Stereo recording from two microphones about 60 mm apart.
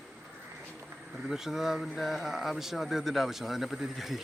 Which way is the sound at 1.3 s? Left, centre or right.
Centre.